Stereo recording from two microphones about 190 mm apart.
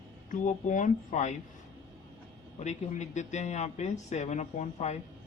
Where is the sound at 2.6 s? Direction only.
40° left (ahead or behind).